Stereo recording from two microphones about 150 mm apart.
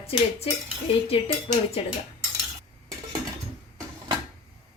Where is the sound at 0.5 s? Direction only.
40° left (ahead or behind).